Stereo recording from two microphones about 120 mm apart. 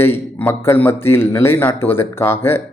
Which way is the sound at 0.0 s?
20° left (ahead or behind).